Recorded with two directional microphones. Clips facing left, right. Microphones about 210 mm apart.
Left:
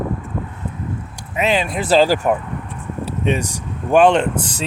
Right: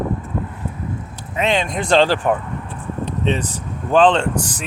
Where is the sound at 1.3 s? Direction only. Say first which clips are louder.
Left 1 dB; 5° left (ahead or behind).